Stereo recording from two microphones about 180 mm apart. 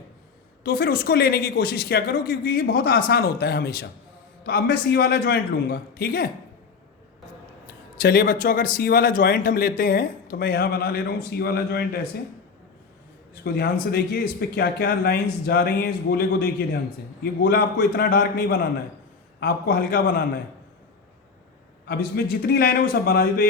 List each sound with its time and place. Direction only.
0.6 s a man's voice: 60° left (ahead or behind)
8.0 s a man's voice: 55° left (ahead or behind)
13.9 s a man's voice: 65° left (ahead or behind)
21.8 s a man's voice: 60° left (ahead or behind)